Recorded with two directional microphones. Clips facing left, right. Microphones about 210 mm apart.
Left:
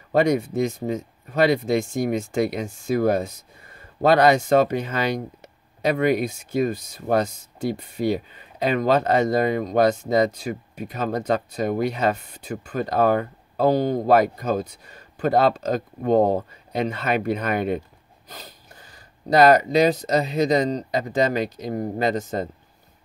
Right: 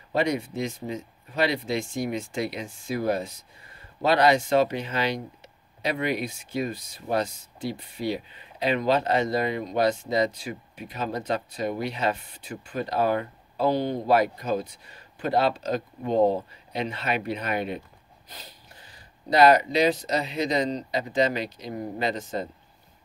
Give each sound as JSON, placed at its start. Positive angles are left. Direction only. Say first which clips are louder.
{"t": 0.1, "sound": "speech", "louder": "left 6 dB", "side_deg": 45}